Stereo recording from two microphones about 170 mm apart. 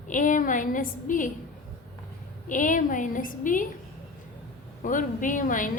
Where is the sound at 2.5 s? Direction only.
50° left (ahead or behind).